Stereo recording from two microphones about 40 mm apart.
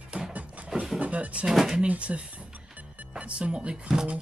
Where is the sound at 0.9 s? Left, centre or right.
Right.